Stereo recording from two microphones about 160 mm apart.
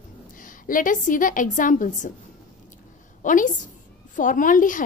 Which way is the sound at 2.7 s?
55° left (ahead or behind).